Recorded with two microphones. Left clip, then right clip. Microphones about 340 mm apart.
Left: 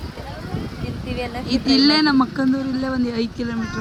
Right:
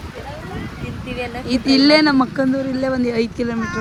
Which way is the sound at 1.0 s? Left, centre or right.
Left.